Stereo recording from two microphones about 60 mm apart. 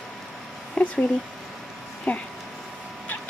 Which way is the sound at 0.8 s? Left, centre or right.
Centre.